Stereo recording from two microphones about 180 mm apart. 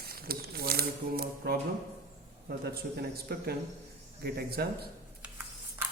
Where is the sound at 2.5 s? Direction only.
60° right (ahead or behind).